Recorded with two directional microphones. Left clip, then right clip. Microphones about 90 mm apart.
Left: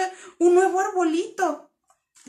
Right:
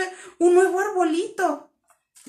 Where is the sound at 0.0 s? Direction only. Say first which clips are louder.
Even; 30° left (ahead or behind).